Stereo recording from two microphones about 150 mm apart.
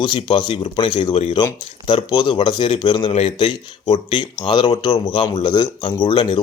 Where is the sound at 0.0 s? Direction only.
35° left (ahead or behind).